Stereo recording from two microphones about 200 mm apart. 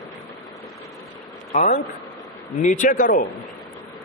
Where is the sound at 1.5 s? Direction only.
35° left (ahead or behind).